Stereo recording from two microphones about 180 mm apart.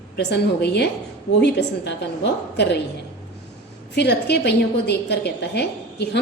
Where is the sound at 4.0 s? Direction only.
65° left (ahead or behind).